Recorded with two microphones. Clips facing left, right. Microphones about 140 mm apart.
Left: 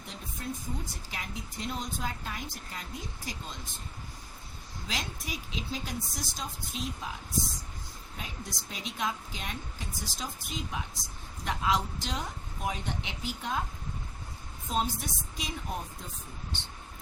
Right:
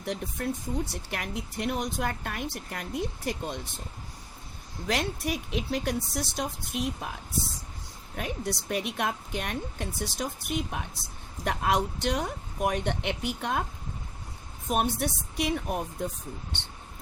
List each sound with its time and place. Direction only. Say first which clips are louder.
0.0 s a woman's voice: right 9 dB; 65° right (ahead or behind)
4.9 s a woman's voice: right 9 dB; 65° right (ahead or behind)
8.1 s a woman's voice: right 10 dB; 65° right (ahead or behind)
14.7 s a woman's voice: right 5 dB; 65° right (ahead or behind)